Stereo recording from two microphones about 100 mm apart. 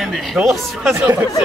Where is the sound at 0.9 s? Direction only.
30° right (ahead or behind).